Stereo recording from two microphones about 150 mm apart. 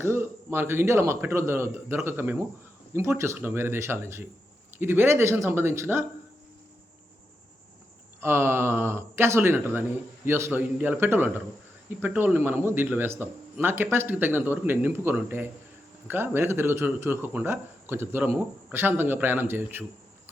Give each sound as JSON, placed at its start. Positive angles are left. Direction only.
{"t": 0.0, "sound": "speech", "side_deg": -15}
{"t": 8.2, "sound": "speech", "side_deg": -15}